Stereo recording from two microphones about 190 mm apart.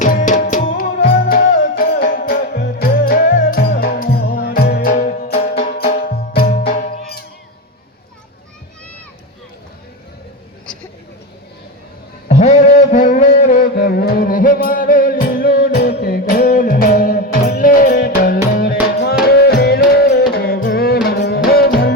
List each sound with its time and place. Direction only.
0.0 s music: 40° left (ahead or behind)
6.7 s music: 35° left (ahead or behind)
12.3 s music: 35° left (ahead or behind); by 21.9 s 55° left (ahead or behind)